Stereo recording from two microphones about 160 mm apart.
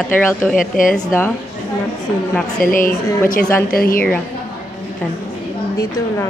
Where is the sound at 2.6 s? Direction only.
60° left (ahead or behind).